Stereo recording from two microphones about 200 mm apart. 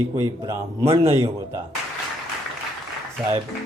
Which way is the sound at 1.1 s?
15° right (ahead or behind).